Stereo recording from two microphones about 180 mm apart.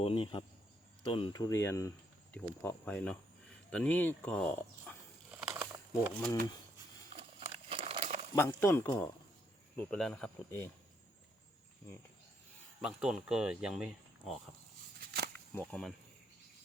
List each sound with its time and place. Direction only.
0.0 s speech: 30° left (ahead or behind); by 4.9 s 10° left (ahead or behind)
5.3 s a sound: 10° right (ahead or behind)
7.1 s crumpling: 35° right (ahead or behind)
8.4 s speech: 15° left (ahead or behind)
12.8 s speech: 5° right (ahead or behind)
15.5 s speech: 5° left (ahead or behind)